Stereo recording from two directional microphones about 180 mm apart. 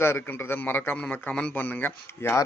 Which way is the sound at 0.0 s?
15° left (ahead or behind).